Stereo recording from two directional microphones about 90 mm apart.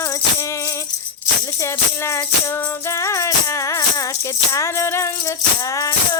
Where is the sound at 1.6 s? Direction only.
30° left (ahead or behind).